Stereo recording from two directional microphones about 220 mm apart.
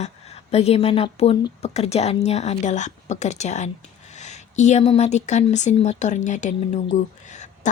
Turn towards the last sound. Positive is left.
turn(degrees=35)  # may be behind; listen again after turning